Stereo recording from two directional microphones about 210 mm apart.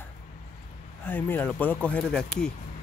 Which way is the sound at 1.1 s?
10° left (ahead or behind).